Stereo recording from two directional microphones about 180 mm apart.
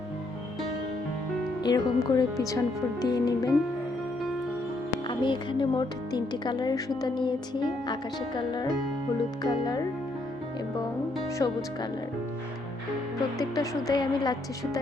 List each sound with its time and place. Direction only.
1.6 s speech: 20° left (ahead or behind)
5.0 s speech: 25° left (ahead or behind)
11.3 s speech: 20° left (ahead or behind)
13.4 s speech: 20° left (ahead or behind)